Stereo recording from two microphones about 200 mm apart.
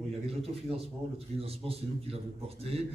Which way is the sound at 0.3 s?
30° right (ahead or behind).